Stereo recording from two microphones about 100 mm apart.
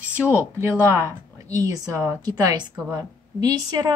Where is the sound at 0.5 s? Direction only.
25° right (ahead or behind).